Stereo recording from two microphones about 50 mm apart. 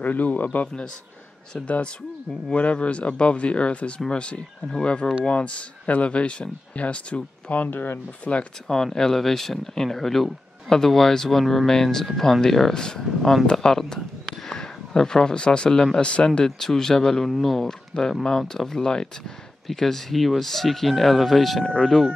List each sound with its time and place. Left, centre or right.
0.0 s a man's voice: left
2.5 s speech: left
7.5 s a man's voice: left
8.3 s speech: centre
16.4 s speech: centre